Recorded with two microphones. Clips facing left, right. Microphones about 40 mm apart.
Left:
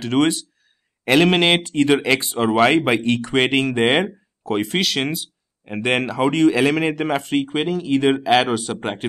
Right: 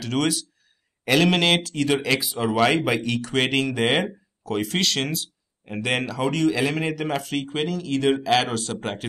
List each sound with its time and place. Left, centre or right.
0.0 s speech: centre